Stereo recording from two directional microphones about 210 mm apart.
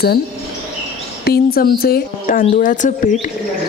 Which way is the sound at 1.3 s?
45° left (ahead or behind).